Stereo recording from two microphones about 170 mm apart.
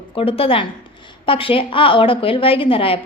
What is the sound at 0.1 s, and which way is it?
A woman's voice, 35° left (ahead or behind).